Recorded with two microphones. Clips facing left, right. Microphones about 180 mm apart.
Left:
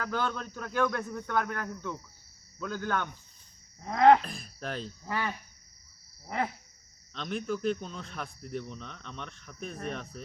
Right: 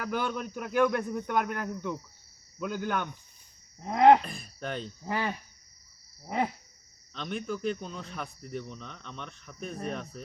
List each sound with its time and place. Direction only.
0.0 s speech: 15° right (ahead or behind)
4.2 s speech: centre (ahead or behind)
5.0 s speech: 25° right (ahead or behind)
6.2 s speech: 15° right (ahead or behind)
7.1 s speech: centre (ahead or behind)